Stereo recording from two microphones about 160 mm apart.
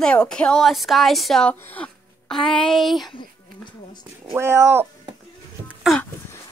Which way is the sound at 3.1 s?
30° left (ahead or behind).